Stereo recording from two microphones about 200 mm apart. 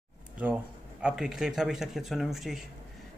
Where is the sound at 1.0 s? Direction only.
5° right (ahead or behind).